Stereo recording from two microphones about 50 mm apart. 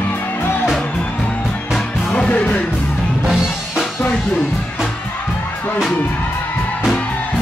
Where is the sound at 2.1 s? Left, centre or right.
Left.